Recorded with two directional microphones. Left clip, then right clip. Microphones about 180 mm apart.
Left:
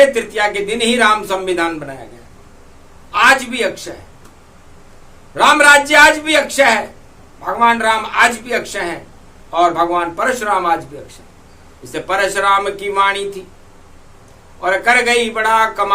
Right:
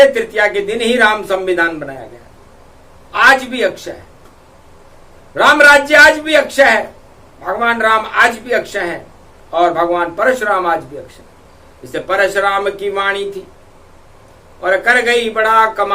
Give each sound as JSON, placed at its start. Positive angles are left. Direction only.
{"t": 0.0, "sound": "speech", "side_deg": 15}
{"t": 3.1, "sound": "speech", "side_deg": 15}
{"t": 5.3, "sound": "speech", "side_deg": 15}
{"t": 11.9, "sound": "speech", "side_deg": 15}
{"t": 14.6, "sound": "speech", "side_deg": 15}